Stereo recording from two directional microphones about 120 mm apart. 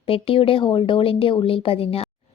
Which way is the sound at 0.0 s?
50° left (ahead or behind).